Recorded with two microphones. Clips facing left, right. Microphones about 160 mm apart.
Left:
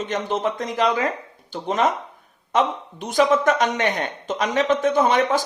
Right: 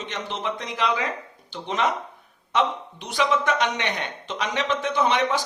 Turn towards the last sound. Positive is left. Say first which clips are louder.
# left 4 dB
turn(degrees=45)  # may be behind; listen again after turning